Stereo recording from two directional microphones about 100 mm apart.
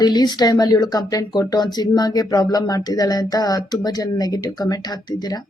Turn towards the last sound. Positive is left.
turn(degrees=40)  # may be behind; listen again after turning